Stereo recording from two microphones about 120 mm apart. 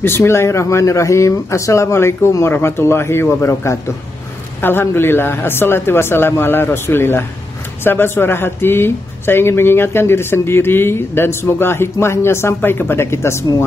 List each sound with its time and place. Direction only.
0.0 s speech: 20° left (ahead or behind)